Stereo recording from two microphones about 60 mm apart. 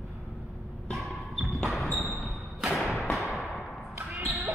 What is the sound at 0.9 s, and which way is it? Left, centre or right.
Music, centre.